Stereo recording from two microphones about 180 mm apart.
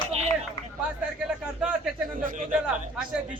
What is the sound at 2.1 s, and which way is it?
Speech, 50° right (ahead or behind).